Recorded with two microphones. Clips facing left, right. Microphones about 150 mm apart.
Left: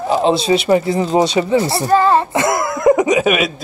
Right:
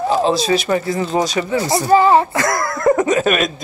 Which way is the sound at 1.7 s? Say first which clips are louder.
Right 5 dB; 10° right (ahead or behind).